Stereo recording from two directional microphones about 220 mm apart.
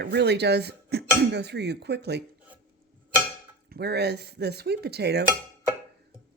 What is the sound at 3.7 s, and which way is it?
Speech, 50° right (ahead or behind).